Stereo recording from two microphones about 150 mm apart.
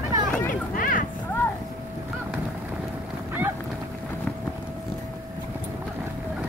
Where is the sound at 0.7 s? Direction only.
65° left (ahead or behind).